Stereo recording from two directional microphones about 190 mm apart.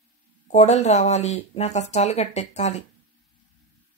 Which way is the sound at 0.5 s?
35° left (ahead or behind).